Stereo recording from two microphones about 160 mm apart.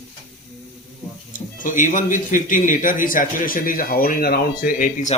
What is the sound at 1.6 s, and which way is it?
A man's voice, 55° left (ahead or behind).